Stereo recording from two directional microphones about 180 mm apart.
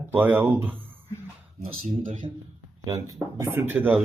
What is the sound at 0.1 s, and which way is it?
Speech, 10° right (ahead or behind).